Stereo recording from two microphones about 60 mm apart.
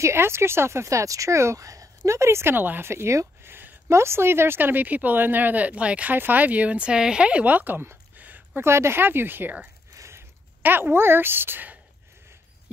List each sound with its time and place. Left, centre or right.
0.0 s a woman's voice: right
2.5 s speech: right
2.9 s speech: right
8.5 s speech: right
9.9 s a sound: right
10.6 s speech: right